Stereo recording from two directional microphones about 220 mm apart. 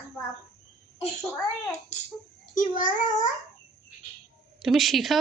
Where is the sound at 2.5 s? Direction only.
35° left (ahead or behind).